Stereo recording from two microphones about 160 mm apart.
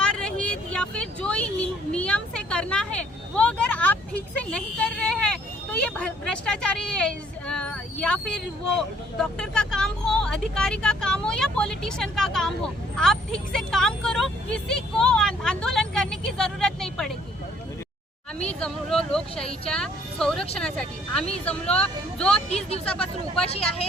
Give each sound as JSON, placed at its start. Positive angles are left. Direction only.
{"t": 0.0, "sound": "vehicle", "side_deg": 5}
{"t": 9.1, "sound": "speech", "side_deg": 5}
{"t": 18.4, "sound": "speech", "side_deg": 5}
{"t": 22.4, "sound": "speech", "side_deg": 40}